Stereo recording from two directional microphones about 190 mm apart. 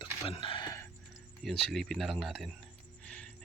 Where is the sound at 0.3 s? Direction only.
30° left (ahead or behind).